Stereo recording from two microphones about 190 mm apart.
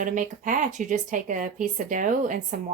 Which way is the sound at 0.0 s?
45° right (ahead or behind).